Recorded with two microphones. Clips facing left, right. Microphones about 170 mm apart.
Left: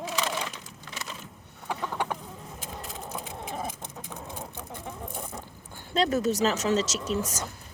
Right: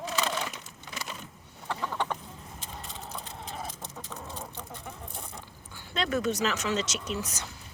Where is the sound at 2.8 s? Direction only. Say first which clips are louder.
Left 4 dB; 5° left (ahead or behind).